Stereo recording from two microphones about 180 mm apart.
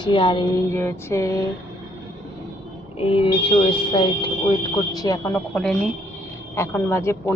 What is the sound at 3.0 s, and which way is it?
A woman's voice, 30° left (ahead or behind).